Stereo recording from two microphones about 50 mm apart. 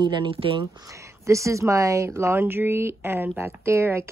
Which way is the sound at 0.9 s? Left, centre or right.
Right.